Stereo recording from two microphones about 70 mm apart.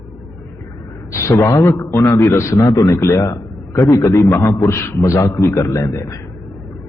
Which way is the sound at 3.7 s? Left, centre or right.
Left.